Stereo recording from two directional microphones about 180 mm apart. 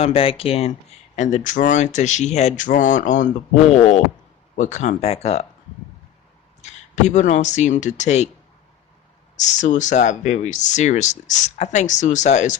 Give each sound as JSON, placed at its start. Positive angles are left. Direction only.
{"t": 0.0, "sound": "speech", "side_deg": 30}
{"t": 6.6, "sound": "speech", "side_deg": 40}
{"t": 9.3, "sound": "speech", "side_deg": 40}